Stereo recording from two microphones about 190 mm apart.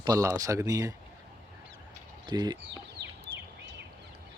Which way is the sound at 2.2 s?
20° right (ahead or behind).